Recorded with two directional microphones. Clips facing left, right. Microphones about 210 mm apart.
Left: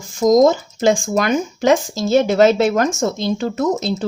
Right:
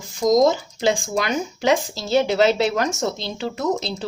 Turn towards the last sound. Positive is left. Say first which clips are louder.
# left 5 dB
turn(degrees=45)  # may be behind; listen again after turning